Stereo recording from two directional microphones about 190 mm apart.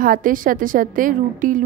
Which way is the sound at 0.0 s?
45° right (ahead or behind).